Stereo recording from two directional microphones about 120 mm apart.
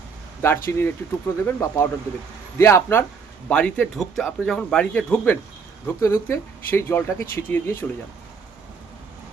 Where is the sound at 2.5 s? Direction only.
25° left (ahead or behind).